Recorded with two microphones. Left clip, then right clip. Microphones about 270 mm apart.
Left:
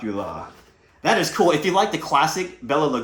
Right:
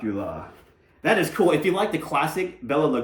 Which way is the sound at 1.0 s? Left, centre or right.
Centre.